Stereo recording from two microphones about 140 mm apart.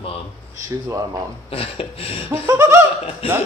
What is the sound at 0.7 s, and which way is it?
Speech, 25° right (ahead or behind).